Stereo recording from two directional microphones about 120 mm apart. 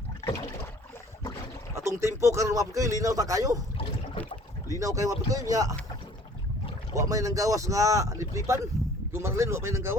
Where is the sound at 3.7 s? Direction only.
50° left (ahead or behind).